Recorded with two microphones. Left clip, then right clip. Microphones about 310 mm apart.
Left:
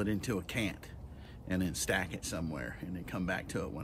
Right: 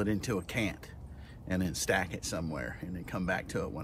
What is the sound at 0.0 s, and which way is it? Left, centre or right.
Speech, centre.